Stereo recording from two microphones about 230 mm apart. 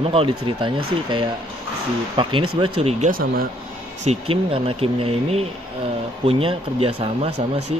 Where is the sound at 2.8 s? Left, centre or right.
Right.